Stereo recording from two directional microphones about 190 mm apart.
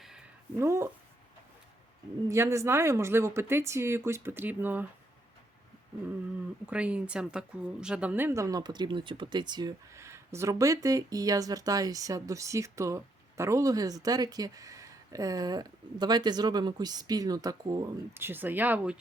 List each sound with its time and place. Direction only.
0.0 s a sound: 5° right (ahead or behind)
0.6 s speech: 15° right (ahead or behind)
2.3 s speech: 15° right (ahead or behind)
6.7 s speech: 5° right (ahead or behind)